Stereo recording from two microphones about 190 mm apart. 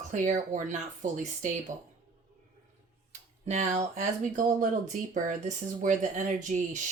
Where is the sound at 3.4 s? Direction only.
35° right (ahead or behind).